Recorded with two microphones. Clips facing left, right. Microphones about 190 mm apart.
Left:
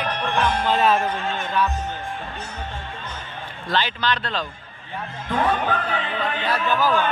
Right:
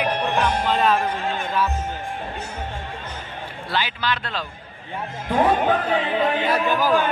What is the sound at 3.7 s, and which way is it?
Speech, 10° right (ahead or behind).